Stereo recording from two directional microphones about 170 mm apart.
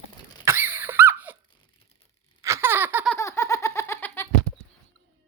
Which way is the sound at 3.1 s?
15° left (ahead or behind).